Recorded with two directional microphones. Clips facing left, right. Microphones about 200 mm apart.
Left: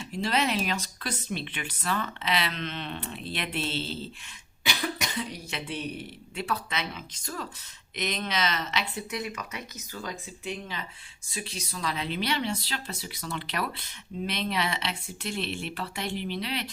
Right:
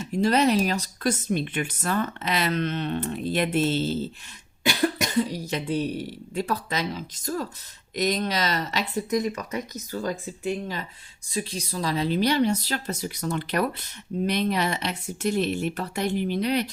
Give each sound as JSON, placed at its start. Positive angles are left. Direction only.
{"t": 0.0, "sound": "speech", "side_deg": -45}